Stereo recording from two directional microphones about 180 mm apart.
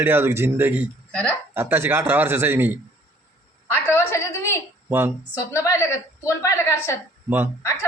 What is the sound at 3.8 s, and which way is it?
Speech, 15° left (ahead or behind).